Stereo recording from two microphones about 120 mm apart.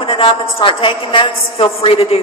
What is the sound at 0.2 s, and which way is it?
A woman's voice, 45° left (ahead or behind).